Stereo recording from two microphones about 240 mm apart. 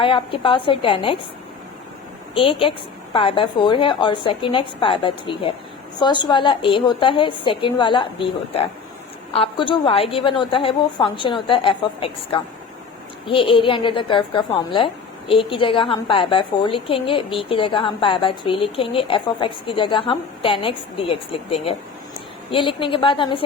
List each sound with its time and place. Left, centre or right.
0.0 s a woman's voice: left
2.3 s a woman's voice: left